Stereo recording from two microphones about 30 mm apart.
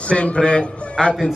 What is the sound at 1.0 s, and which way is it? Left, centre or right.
Speech, centre.